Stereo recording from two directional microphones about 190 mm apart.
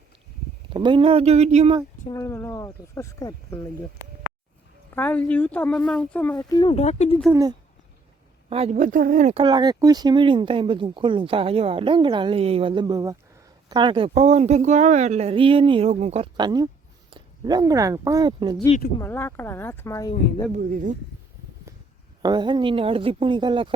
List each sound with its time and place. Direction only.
0.7 s speech: 25° right (ahead or behind)
2.0 s speech: 15° left (ahead or behind)
4.9 s speech: 10° left (ahead or behind)
6.3 s speech: 20° left (ahead or behind)
6.7 s speech: 35° left (ahead or behind)
8.4 s speech: 30° right (ahead or behind)
9.4 s speech: 20° right (ahead or behind)
18.9 s speech: 10° left (ahead or behind)
20.5 s speech: 45° right (ahead or behind)
22.2 s speech: 20° right (ahead or behind)